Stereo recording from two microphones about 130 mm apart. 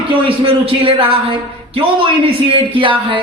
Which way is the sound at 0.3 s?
45° right (ahead or behind).